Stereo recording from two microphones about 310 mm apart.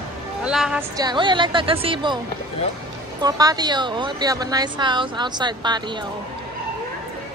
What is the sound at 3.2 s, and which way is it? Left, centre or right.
Speech, centre.